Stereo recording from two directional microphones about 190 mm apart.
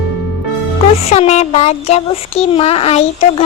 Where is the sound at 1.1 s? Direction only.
35° left (ahead or behind).